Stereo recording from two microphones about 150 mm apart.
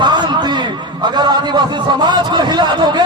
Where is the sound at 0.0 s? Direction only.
30° right (ahead or behind).